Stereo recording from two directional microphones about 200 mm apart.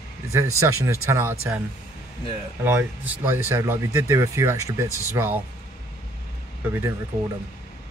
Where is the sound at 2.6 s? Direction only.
10° right (ahead or behind).